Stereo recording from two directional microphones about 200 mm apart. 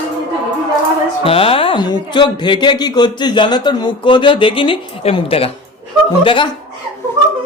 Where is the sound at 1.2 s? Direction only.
30° left (ahead or behind).